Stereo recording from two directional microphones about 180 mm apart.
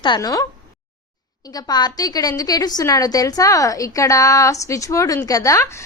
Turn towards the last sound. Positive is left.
turn(degrees=20)  # may be behind; listen again after turning